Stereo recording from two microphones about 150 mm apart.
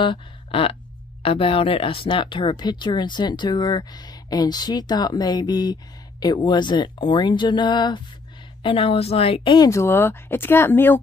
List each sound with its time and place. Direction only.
0.0 s a sound: 35° left (ahead or behind)
1.2 s a woman's voice: 40° left (ahead or behind)
9.7 s speech: 15° left (ahead or behind)